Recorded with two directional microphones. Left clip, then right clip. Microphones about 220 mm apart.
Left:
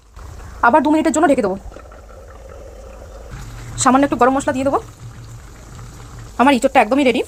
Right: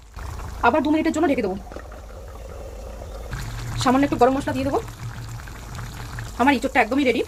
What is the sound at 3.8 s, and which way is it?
Speech, 20° left (ahead or behind).